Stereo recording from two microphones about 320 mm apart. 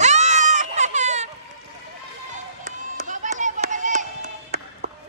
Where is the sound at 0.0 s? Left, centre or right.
Right.